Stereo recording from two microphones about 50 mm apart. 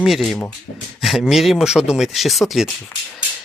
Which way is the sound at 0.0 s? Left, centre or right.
Centre.